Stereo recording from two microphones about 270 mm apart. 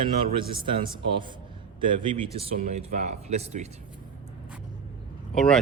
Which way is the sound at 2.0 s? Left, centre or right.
Centre.